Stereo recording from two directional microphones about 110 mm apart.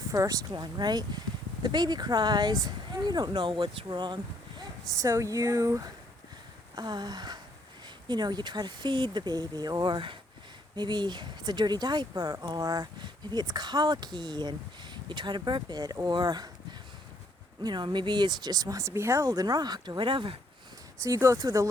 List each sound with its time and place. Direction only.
0.1 s speech: 30° right (ahead or behind)
6.7 s speech: 40° right (ahead or behind)
17.6 s speech: 40° right (ahead or behind)
21.0 s speech: 30° right (ahead or behind)